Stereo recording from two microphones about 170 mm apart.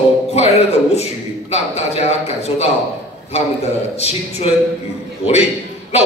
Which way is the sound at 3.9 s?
40° left (ahead or behind).